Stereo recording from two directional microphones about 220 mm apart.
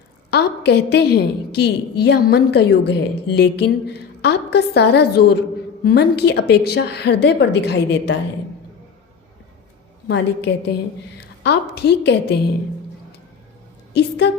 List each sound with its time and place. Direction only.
0.3 s a woman's voice: 50° left (ahead or behind)
10.1 s a woman's voice: 50° left (ahead or behind)